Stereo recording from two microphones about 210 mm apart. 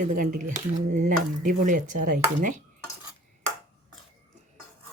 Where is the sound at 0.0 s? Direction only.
40° right (ahead or behind).